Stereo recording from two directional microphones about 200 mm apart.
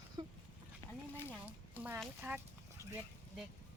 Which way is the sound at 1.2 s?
10° right (ahead or behind).